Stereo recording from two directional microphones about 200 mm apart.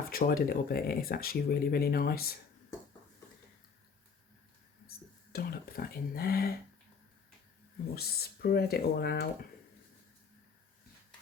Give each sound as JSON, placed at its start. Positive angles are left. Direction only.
{"t": 0.1, "sound": "speech", "side_deg": 45}
{"t": 5.3, "sound": "speech", "side_deg": 50}
{"t": 7.9, "sound": "speech", "side_deg": 50}